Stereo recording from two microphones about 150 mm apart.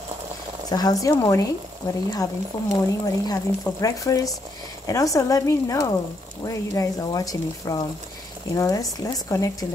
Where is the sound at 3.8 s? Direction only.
20° left (ahead or behind).